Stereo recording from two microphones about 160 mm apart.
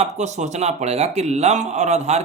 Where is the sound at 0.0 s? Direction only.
45° right (ahead or behind).